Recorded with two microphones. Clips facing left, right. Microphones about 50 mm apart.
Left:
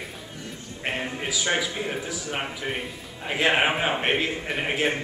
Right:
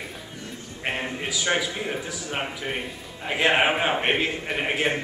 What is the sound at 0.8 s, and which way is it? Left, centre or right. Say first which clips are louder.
A man's voice: even; centre.